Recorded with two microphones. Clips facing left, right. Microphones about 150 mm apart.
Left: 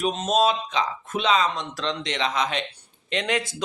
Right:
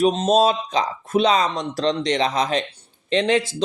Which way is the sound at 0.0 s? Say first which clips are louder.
Right 5 dB; 35° right (ahead or behind).